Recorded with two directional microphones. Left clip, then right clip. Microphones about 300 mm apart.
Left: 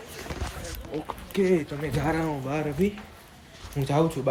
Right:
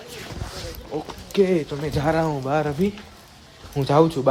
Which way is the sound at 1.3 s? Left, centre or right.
Centre.